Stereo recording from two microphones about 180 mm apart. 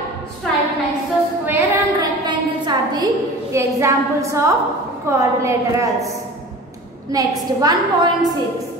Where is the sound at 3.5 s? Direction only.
15° right (ahead or behind).